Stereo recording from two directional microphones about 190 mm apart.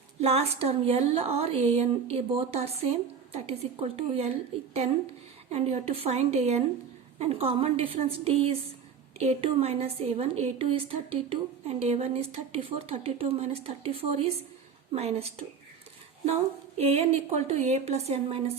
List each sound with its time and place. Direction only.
0.2 s a woman's voice: 35° right (ahead or behind)
5.5 s a woman's voice: 35° right (ahead or behind)